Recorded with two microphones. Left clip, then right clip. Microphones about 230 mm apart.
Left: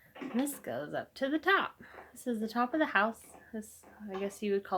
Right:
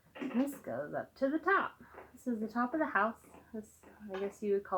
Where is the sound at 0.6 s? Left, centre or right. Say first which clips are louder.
Left 1 dB; left.